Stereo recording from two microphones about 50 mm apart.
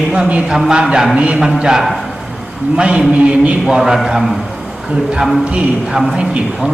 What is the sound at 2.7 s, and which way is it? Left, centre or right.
Speech, right.